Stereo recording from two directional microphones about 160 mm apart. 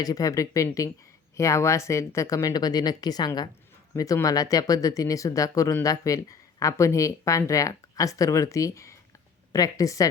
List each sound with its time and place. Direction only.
0.0 s speech: 20° left (ahead or behind)